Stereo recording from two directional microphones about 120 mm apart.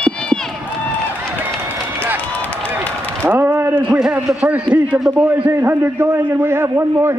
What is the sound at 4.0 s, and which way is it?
A man's voice, 5° right (ahead or behind).